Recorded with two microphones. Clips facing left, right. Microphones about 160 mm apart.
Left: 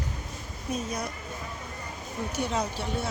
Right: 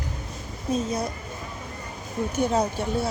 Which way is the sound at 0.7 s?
30° right (ahead or behind).